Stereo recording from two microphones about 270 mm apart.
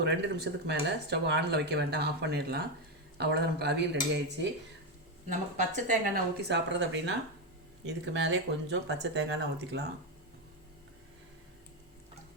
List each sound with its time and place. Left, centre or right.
0.0 s speech: right
5.3 s speech: right
6.5 s speech: right